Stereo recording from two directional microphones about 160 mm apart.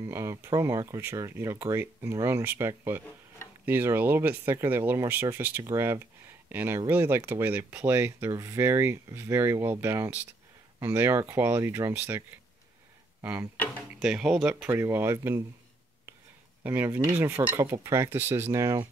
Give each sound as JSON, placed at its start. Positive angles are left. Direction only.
{"t": 0.0, "sound": "speech", "side_deg": -15}
{"t": 16.6, "sound": "speech", "side_deg": -10}